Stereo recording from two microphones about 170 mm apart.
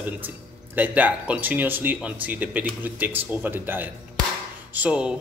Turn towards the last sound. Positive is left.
turn(degrees=-5)  # may be behind; listen again after turning